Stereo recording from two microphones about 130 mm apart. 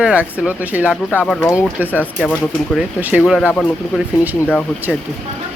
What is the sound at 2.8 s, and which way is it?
Speech, 10° right (ahead or behind).